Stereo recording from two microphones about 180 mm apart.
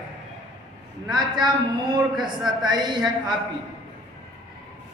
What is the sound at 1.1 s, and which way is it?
Speech, 25° right (ahead or behind).